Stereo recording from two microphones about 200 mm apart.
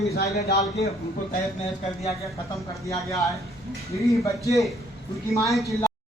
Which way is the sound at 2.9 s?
15° left (ahead or behind).